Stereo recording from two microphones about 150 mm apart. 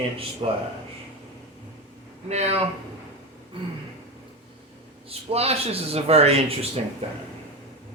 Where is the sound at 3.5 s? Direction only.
35° right (ahead or behind).